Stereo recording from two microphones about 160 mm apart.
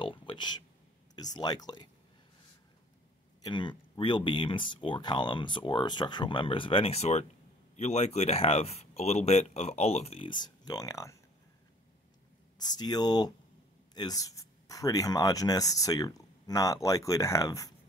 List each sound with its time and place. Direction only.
0.0 s a sound: 30° left (ahead or behind)
1.1 s speech: 25° left (ahead or behind)
3.4 s speech: 30° left (ahead or behind)
12.5 s speech: 25° left (ahead or behind)